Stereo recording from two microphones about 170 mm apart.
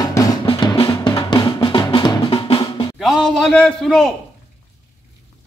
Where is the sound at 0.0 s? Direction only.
20° left (ahead or behind).